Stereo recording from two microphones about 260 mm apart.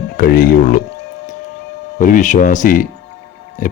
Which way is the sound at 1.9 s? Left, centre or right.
Left.